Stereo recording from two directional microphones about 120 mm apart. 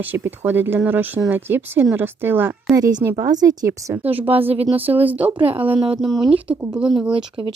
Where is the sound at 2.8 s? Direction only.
35° right (ahead or behind).